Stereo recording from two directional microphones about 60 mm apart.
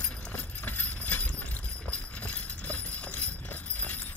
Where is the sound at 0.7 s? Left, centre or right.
Left.